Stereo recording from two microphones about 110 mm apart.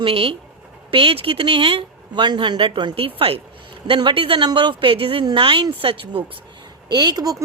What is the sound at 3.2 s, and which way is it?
Speech, 60° right (ahead or behind).